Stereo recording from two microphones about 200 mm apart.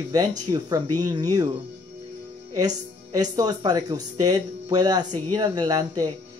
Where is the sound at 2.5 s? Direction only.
20° right (ahead or behind).